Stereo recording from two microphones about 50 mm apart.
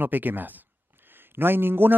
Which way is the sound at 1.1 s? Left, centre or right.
Right.